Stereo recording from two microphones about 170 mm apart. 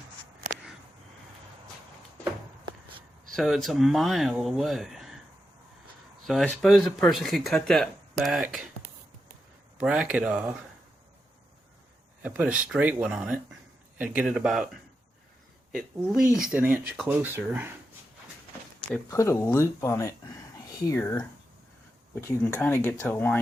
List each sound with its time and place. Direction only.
0.4 s a sound: 45° right (ahead or behind)
3.3 s speech: centre (ahead or behind)
6.2 s speech: centre (ahead or behind)
9.7 s speech: 5° right (ahead or behind)
12.2 s speech: 5° right (ahead or behind)
16.3 s speech: 5° right (ahead or behind)
18.9 s speech: 15° left (ahead or behind)